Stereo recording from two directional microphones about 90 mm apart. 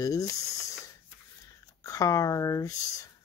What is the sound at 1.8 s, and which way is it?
Speech, 40° left (ahead or behind).